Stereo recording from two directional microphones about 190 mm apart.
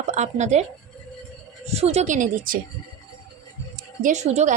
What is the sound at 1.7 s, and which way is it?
Speech, 35° right (ahead or behind).